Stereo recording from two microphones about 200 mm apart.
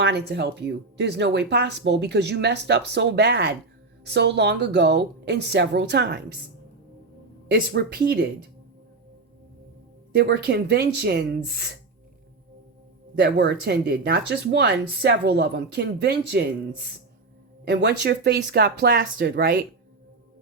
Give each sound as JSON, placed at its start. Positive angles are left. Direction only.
{"t": 0.0, "sound": "speech", "side_deg": -55}
{"t": 7.4, "sound": "speech", "side_deg": -50}
{"t": 10.2, "sound": "speech", "side_deg": -55}
{"t": 13.1, "sound": "speech", "side_deg": -50}
{"t": 17.7, "sound": "speech", "side_deg": -60}